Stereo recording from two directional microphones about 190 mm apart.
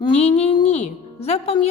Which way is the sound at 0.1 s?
35° left (ahead or behind).